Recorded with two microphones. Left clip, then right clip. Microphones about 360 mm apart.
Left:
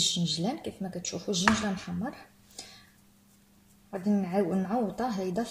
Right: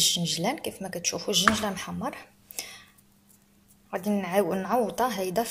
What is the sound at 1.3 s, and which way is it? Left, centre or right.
Speech, right.